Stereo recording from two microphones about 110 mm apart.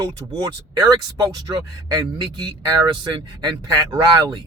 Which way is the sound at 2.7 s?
40° right (ahead or behind).